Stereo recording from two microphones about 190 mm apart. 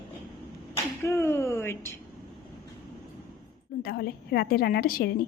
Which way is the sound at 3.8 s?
55° left (ahead or behind).